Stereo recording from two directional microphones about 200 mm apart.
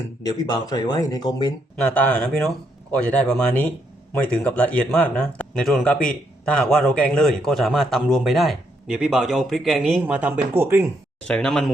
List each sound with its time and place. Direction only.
0.2 s speech: 20° left (ahead or behind)
1.9 s a man's voice: 5° left (ahead or behind); by 10.9 s 10° right (ahead or behind)
11.3 s a man's voice: 5° left (ahead or behind)